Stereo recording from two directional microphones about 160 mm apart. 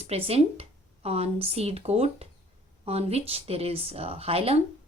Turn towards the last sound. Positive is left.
turn(degrees=-35)  # may be behind; listen again after turning